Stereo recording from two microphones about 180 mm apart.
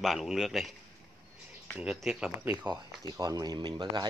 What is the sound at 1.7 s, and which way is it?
Speech, 5° right (ahead or behind).